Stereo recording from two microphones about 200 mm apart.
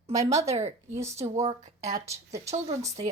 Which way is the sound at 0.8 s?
35° right (ahead or behind).